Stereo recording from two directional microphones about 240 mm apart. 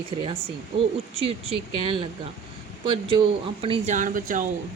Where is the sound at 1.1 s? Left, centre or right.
Right.